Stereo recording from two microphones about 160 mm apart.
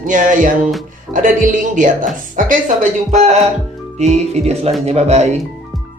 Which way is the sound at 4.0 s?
45° right (ahead or behind).